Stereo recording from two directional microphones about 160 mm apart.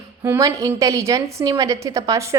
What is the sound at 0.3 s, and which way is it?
A woman's voice, 20° right (ahead or behind).